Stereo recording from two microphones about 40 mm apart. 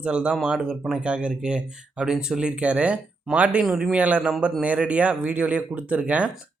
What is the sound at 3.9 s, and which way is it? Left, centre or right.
Speech, right.